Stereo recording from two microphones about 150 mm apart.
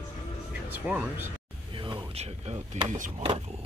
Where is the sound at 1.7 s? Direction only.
30° right (ahead or behind).